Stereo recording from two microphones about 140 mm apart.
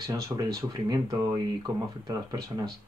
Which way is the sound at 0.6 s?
30° right (ahead or behind).